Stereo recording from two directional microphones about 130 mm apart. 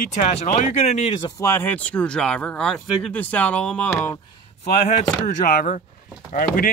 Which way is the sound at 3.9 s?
20° left (ahead or behind).